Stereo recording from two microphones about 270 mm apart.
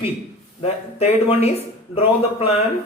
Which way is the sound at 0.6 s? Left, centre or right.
Left.